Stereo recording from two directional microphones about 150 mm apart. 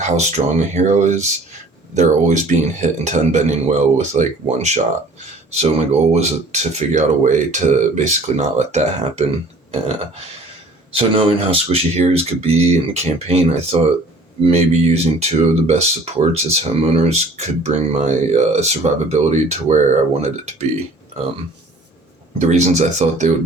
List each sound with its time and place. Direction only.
0.0 s speech: 50° right (ahead or behind)
10.9 s speech: 35° right (ahead or behind)
22.4 s speech: 50° right (ahead or behind)